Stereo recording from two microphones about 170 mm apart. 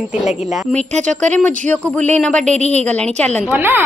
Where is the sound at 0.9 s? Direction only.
45° right (ahead or behind).